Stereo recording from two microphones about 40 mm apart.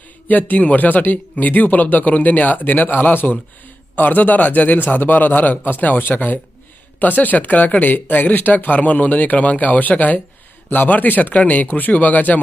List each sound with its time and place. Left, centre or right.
0.3 s speech: left